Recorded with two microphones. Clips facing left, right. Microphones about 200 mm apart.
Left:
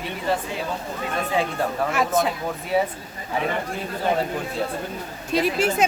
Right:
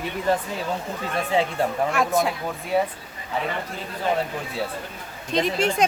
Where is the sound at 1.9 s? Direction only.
Centre (ahead or behind).